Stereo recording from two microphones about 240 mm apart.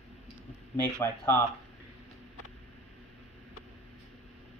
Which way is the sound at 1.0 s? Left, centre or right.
Centre.